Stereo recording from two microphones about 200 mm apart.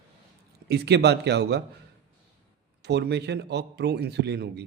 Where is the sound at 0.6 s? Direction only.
55° right (ahead or behind).